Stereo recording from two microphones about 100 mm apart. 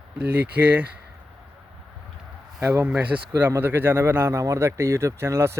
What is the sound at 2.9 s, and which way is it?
Speech, 10° right (ahead or behind).